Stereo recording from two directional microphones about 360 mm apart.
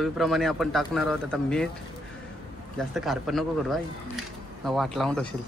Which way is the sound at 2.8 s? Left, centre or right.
Centre.